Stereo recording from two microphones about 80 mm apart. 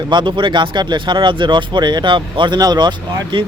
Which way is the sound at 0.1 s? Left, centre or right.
Right.